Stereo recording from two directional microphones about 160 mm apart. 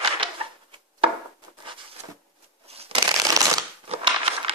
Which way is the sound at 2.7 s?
40° right (ahead or behind).